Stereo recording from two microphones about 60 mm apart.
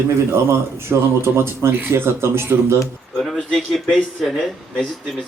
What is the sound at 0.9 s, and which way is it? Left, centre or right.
Speech, right.